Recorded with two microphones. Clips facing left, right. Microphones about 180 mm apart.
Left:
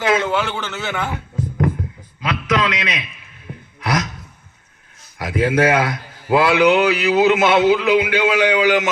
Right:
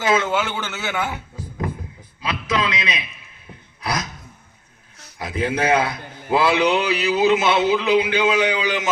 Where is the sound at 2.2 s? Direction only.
30° right (ahead or behind).